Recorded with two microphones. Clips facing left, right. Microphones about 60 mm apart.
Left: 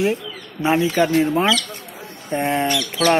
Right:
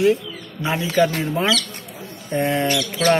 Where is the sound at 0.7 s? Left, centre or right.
Left.